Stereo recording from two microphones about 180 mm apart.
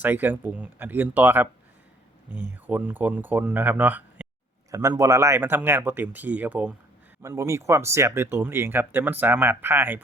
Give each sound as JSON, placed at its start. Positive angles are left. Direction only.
{"t": 0.0, "sound": "speech", "side_deg": -10}